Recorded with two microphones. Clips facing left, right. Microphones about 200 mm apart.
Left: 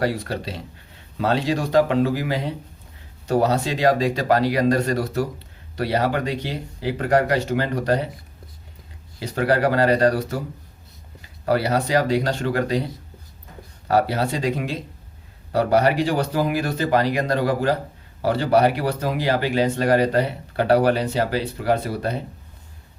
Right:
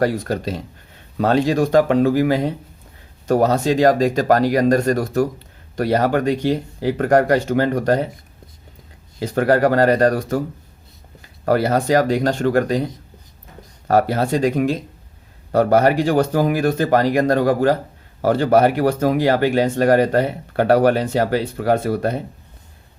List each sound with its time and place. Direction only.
0.0 s speech: 45° right (ahead or behind)
9.1 s speech: 50° right (ahead or behind)
11.4 s speech: 50° right (ahead or behind)
13.8 s speech: 50° right (ahead or behind)